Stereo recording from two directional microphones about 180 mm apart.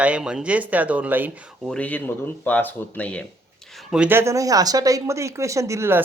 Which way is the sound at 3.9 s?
5° right (ahead or behind).